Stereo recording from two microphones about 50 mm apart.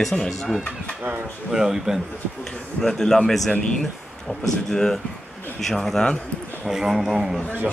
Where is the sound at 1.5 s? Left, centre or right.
Centre.